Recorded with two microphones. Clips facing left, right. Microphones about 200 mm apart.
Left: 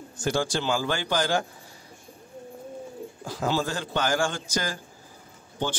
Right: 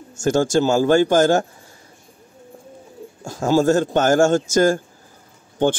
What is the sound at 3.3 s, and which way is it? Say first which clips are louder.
Speech: right 11 dB; 45° right (ahead or behind).